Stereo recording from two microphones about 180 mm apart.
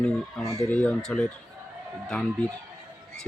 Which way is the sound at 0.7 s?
5° left (ahead or behind).